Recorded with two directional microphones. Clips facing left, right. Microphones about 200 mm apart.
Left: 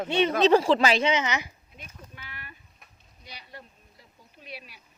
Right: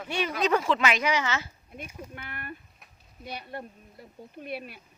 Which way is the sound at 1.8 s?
55° right (ahead or behind).